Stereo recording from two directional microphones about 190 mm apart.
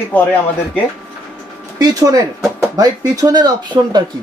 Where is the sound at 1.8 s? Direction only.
20° right (ahead or behind).